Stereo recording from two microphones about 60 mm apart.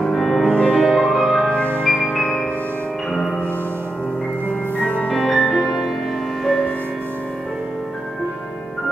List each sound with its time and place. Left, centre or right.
0.0 s music: centre
0.4 s music: left
0.8 s music: centre
4.7 s music: left
5.1 s music: centre